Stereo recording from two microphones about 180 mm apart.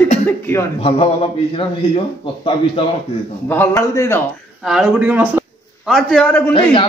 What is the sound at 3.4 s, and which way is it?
Speech, 10° left (ahead or behind).